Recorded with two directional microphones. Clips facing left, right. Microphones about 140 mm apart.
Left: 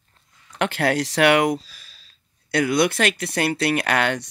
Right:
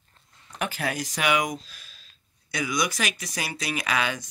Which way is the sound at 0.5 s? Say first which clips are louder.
Left 8 dB; 75° left (ahead or behind).